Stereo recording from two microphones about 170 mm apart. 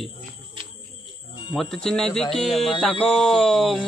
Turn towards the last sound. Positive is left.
turn(degrees=0)  # may be behind; listen again after turning